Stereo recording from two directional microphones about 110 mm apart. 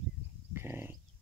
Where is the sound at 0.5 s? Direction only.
20° right (ahead or behind).